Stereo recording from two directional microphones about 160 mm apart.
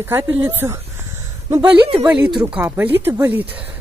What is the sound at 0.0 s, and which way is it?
Speech, 15° right (ahead or behind).